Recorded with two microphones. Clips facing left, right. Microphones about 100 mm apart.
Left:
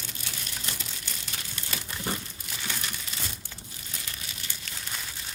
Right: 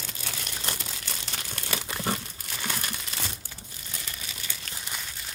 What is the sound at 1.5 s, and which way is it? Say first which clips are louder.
Crumpling: right 5 dB; 70° right (ahead or behind).